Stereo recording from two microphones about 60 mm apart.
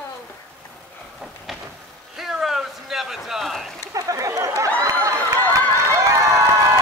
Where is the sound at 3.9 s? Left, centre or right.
Right.